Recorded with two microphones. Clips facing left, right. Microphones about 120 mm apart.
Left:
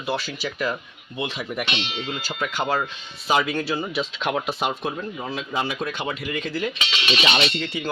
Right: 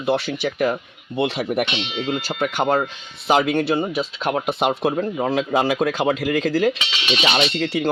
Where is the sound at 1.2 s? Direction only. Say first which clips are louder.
Right 7 dB; 70° right (ahead or behind).